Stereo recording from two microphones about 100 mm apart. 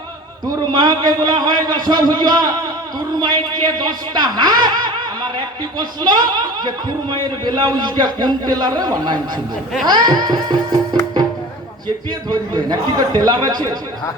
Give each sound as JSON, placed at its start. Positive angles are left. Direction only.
{"t": 0.4, "sound": "a man's voice", "side_deg": -45}
{"t": 5.7, "sound": "a man's voice", "side_deg": -45}
{"t": 9.8, "sound": "music", "side_deg": -45}
{"t": 12.3, "sound": "a man's voice", "side_deg": -40}